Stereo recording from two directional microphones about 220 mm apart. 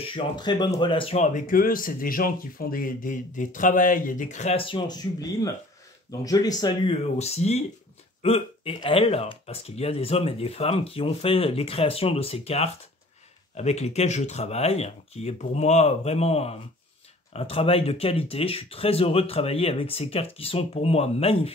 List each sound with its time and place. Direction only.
0.1 s speech: 20° left (ahead or behind)